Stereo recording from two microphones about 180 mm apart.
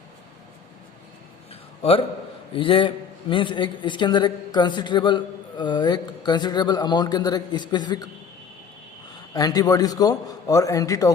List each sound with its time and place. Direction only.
2.6 s a man's voice: 30° left (ahead or behind)
9.3 s a man's voice: 20° left (ahead or behind)